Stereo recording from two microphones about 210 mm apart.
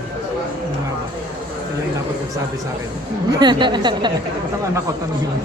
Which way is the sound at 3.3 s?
20° right (ahead or behind).